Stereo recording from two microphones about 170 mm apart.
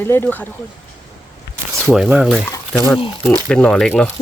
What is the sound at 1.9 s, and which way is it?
Speech, 5° right (ahead or behind).